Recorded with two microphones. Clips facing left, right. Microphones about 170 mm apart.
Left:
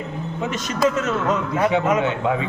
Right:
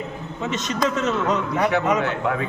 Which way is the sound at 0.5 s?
5° left (ahead or behind).